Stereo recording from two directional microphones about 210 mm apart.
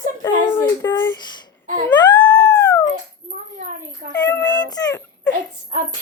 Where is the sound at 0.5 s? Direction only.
15° left (ahead or behind).